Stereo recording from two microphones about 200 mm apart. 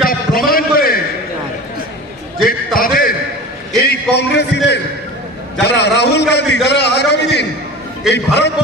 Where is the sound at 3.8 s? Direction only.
55° left (ahead or behind).